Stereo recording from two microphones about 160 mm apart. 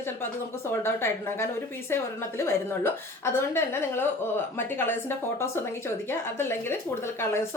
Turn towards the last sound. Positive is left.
turn(degrees=15)  # may be behind; listen again after turning